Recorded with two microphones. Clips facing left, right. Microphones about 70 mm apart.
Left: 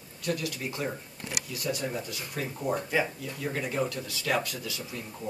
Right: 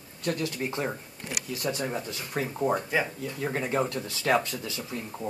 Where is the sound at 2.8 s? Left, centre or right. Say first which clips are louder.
Right 1 dB; centre.